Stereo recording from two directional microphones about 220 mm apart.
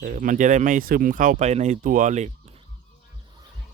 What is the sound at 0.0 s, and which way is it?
Speech, 35° right (ahead or behind).